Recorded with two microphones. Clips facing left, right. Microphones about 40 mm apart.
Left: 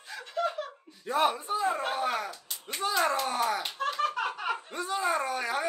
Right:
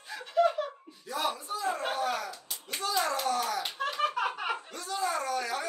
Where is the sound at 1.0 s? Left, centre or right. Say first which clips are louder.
Left 6 dB; left.